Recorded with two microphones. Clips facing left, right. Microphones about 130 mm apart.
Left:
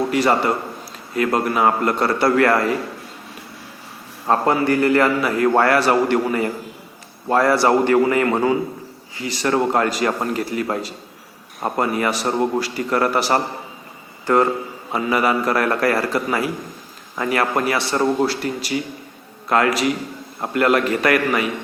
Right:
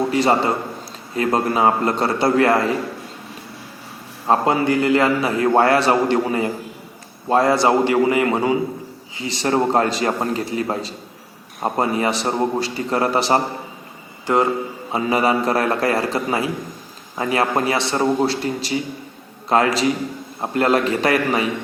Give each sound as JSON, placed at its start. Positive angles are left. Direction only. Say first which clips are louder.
{"t": 0.1, "sound": "a man's voice", "louder": "even", "side_deg": -25}
{"t": 4.3, "sound": "a man's voice", "louder": "even", "side_deg": -20}
{"t": 14.9, "sound": "a man's voice", "louder": "right 1 dB", "side_deg": -25}